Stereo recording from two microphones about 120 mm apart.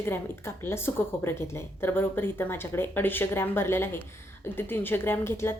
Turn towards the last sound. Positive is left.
turn(degrees=20)  # may be behind; listen again after turning